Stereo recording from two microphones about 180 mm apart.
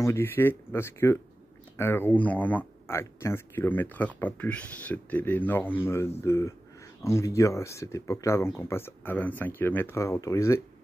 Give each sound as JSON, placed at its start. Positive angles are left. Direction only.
{"t": 0.0, "sound": "speech", "side_deg": 15}